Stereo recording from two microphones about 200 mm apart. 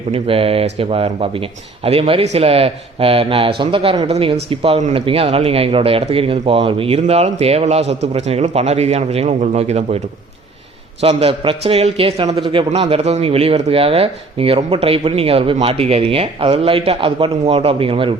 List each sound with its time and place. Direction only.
0.1 s speech: 30° right (ahead or behind)
11.0 s speech: 30° right (ahead or behind)